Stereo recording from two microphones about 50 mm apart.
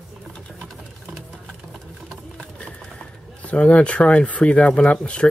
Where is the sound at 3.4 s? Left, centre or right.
Left.